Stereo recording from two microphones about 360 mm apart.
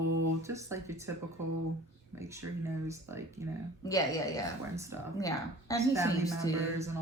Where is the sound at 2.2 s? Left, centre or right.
Centre.